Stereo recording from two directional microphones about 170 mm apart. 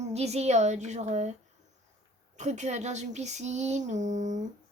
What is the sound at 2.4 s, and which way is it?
Speech, 45° right (ahead or behind).